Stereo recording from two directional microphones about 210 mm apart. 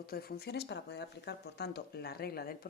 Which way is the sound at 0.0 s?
45° left (ahead or behind).